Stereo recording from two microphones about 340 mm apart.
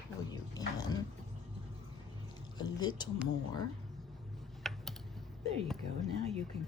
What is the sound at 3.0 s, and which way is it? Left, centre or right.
Speech, centre.